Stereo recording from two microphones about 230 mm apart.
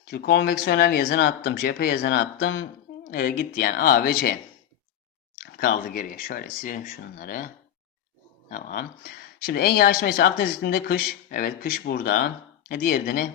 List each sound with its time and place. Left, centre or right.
0.1 s speech: left
2.4 s speech: left
3.1 s speech: left
5.4 s speech: left